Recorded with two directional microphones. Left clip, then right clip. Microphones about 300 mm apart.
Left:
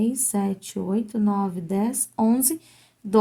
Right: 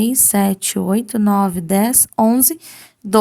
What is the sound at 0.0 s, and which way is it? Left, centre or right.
A woman's voice, right.